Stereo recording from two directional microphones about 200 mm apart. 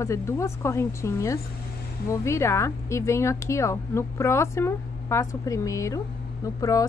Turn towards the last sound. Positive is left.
turn(degrees=15)  # may be behind; listen again after turning